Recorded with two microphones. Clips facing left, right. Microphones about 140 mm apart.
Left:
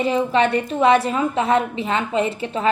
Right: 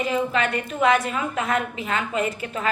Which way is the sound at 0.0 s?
30° left (ahead or behind).